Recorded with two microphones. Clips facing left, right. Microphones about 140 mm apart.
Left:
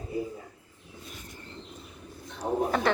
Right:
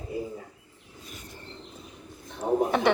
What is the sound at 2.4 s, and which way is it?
Speech, 10° right (ahead or behind).